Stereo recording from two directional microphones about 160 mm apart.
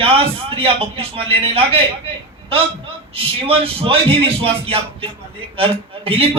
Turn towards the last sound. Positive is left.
turn(degrees=-35)  # may be behind; listen again after turning